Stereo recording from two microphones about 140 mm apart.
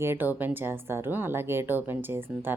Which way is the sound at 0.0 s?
15° right (ahead or behind).